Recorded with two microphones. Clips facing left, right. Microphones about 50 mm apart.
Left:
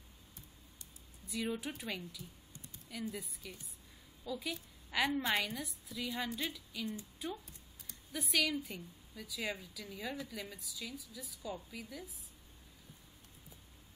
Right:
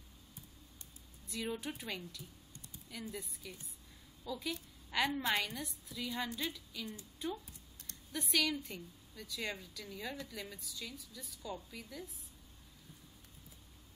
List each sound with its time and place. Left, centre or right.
1.3 s a woman's voice: centre